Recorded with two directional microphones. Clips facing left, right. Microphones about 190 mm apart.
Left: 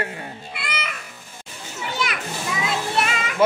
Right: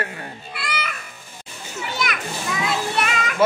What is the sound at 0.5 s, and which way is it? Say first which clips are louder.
Music: right 3 dB; 25° left (ahead or behind).